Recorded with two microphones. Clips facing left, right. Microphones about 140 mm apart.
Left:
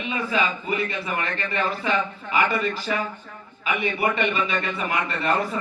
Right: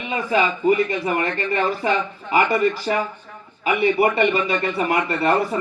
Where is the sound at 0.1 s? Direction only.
40° right (ahead or behind).